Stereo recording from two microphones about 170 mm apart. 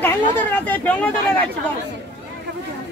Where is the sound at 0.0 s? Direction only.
10° left (ahead or behind).